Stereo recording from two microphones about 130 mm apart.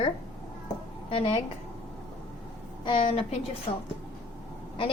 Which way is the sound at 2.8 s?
40° left (ahead or behind).